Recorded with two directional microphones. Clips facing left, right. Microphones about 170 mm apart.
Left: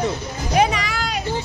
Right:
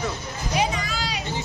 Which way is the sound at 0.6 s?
65° left (ahead or behind).